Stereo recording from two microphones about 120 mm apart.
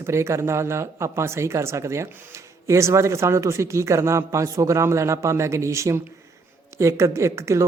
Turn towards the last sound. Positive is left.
turn(degrees=-25)  # may be behind; listen again after turning